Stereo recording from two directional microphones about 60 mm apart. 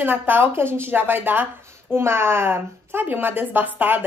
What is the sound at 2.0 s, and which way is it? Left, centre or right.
A woman's voice, right.